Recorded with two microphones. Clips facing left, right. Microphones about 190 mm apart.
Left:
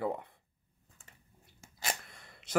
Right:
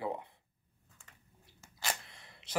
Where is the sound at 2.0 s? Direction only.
50° left (ahead or behind).